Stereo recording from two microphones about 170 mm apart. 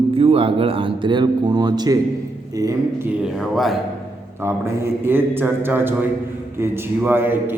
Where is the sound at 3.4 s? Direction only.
Centre (ahead or behind).